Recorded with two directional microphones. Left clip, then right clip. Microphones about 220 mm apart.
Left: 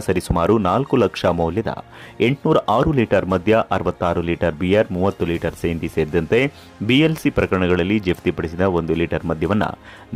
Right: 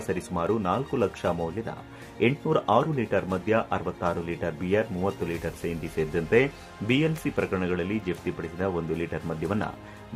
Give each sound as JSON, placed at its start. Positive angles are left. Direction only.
{"t": 0.1, "sound": "speech", "side_deg": 45}